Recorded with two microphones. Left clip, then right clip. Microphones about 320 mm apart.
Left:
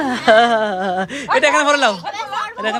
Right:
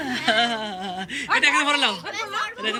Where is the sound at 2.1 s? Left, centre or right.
Left.